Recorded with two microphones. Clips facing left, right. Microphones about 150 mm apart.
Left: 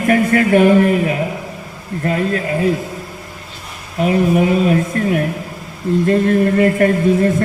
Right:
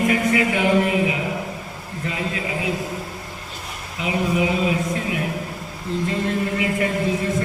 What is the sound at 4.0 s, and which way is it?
A man's voice, 55° left (ahead or behind).